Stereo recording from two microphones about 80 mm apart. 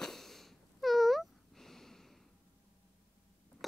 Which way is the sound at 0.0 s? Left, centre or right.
Centre.